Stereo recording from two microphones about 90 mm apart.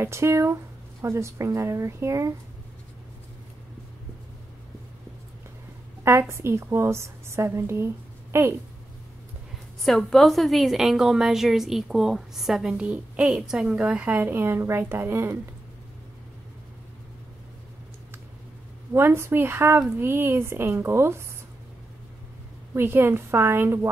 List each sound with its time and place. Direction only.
0.0 s speech: 30° right (ahead or behind)
6.0 s a woman's voice: 30° right (ahead or behind)
9.8 s a woman's voice: centre (ahead or behind)
12.8 s a woman's voice: 15° right (ahead or behind)
18.9 s a woman's voice: 30° right (ahead or behind)
22.8 s a woman's voice: 25° right (ahead or behind)